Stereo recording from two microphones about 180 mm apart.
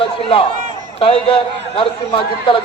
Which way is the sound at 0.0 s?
30° left (ahead or behind).